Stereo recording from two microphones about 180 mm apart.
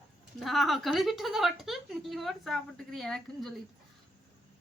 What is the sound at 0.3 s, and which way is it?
A woman's voice, centre (ahead or behind).